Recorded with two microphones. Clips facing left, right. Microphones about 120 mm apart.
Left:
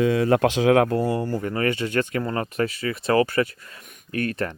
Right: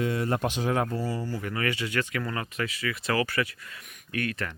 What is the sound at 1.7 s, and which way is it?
Speech, 45° left (ahead or behind).